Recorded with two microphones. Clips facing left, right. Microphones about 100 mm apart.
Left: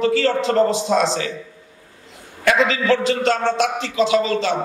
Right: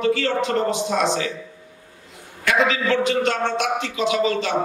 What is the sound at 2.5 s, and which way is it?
A man's voice, 35° left (ahead or behind).